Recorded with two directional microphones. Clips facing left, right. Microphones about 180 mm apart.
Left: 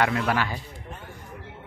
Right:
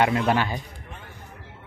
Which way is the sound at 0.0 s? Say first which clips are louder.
Right 3 dB; 20° right (ahead or behind).